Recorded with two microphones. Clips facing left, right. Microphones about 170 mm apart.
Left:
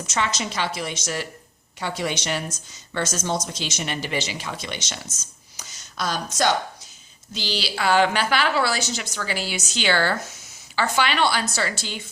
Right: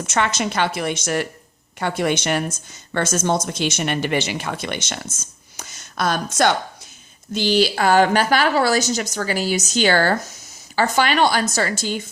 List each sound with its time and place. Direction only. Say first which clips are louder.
0.0 s a woman's voice: right 5 dB; 55° right (ahead or behind)